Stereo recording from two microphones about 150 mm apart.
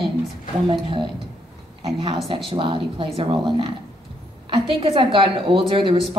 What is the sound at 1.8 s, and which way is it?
A woman's voice, 35° right (ahead or behind).